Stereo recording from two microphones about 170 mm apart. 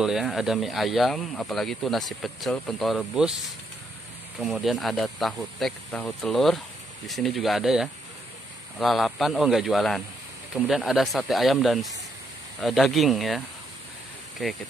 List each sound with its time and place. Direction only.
0.0 s speech: centre (ahead or behind)
14.4 s speech: centre (ahead or behind)